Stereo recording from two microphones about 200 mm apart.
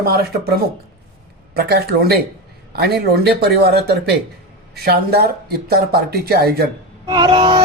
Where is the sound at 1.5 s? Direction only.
55° right (ahead or behind).